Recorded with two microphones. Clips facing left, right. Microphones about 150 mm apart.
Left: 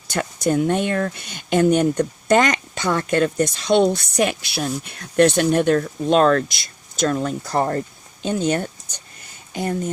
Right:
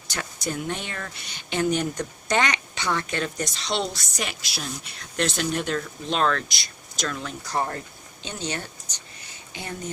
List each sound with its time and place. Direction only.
0.1 s speech: 50° left (ahead or behind)